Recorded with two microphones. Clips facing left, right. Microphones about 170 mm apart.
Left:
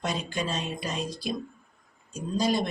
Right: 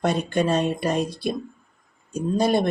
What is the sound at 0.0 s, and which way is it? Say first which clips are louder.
Speech: right 9 dB; 60° right (ahead or behind).